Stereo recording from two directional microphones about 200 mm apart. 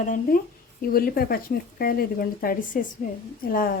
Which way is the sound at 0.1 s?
45° left (ahead or behind).